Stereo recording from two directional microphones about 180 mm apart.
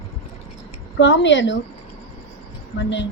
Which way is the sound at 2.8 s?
80° left.